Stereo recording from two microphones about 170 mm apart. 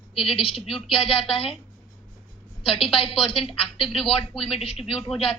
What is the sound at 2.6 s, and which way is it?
A woman's voice, 30° left (ahead or behind).